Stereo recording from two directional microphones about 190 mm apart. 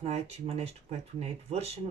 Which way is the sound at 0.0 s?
35° right (ahead or behind).